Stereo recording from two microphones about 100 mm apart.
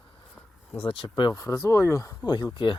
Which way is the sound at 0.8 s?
65° left (ahead or behind).